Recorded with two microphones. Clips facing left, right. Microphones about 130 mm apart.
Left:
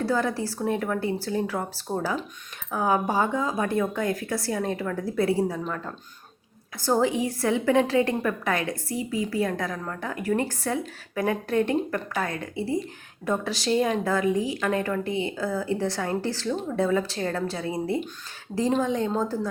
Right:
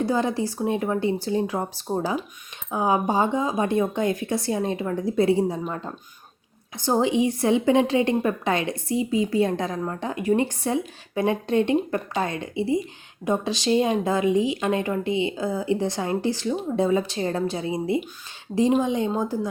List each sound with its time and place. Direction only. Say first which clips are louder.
0.0 s a woman's voice: right 2 dB; 20° right (ahead or behind)